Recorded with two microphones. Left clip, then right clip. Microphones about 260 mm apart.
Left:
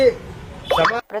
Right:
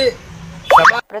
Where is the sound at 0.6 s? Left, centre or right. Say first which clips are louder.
Right 8 dB; right.